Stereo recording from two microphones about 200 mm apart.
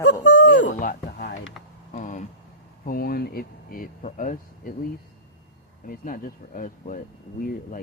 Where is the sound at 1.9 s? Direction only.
40° left (ahead or behind).